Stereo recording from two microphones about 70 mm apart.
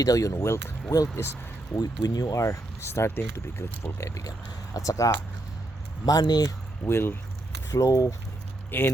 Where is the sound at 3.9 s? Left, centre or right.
Left.